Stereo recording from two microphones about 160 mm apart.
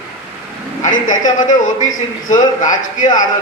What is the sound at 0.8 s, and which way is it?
A man's voice, 55° left (ahead or behind).